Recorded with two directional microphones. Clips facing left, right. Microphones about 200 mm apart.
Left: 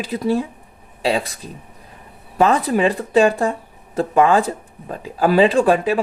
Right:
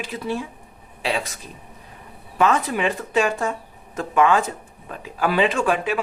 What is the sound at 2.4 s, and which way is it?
Speech, 35° left (ahead or behind).